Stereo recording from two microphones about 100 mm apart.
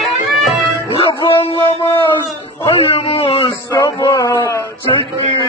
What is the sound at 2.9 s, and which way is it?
Speech, 80° left.